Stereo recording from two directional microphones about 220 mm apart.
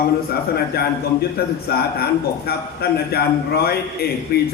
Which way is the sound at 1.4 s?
45° left (ahead or behind).